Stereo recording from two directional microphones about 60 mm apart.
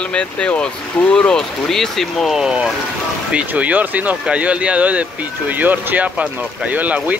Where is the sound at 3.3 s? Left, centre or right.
Right.